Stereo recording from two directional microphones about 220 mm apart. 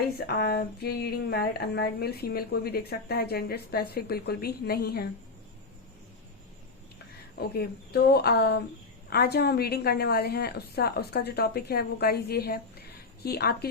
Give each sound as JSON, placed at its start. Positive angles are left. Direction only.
{"t": 0.3, "sound": "speech", "side_deg": 45}
{"t": 7.3, "sound": "speech", "side_deg": 45}